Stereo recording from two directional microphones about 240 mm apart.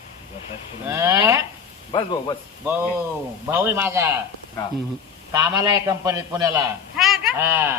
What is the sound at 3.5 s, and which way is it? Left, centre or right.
Speech, centre.